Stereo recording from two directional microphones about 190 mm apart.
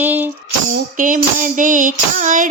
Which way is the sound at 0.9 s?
45° right (ahead or behind).